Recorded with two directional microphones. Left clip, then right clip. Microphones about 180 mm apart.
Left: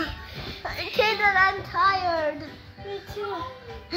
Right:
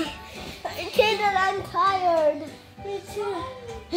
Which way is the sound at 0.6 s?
20° right (ahead or behind).